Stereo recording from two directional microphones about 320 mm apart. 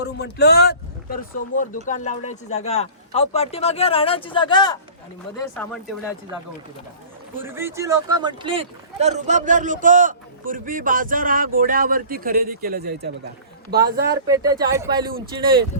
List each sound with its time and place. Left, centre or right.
0.0 s speech: left; by 4.8 s centre
5.5 s speech: centre
7.3 s speech: centre; by 14.2 s right
14.3 s speech: centre